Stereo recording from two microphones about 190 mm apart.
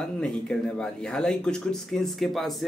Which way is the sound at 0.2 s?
5° left (ahead or behind).